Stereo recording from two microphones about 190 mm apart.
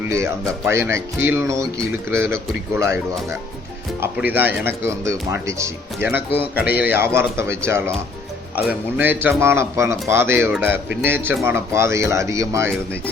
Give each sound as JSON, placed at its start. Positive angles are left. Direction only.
{"t": 0.1, "sound": "speech", "side_deg": -15}
{"t": 4.0, "sound": "speech", "side_deg": -10}